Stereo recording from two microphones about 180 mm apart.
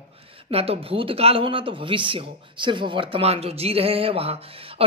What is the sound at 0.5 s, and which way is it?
Speech, 35° right (ahead or behind).